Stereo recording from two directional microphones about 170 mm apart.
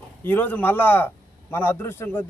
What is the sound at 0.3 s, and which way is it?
A man's voice, 10° left (ahead or behind).